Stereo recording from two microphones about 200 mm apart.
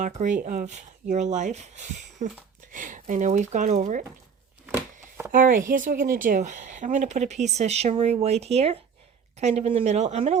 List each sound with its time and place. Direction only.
0.0 s speech: 40° right (ahead or behind)
4.6 s a sound: 10° right (ahead or behind)
5.3 s speech: 40° right (ahead or behind)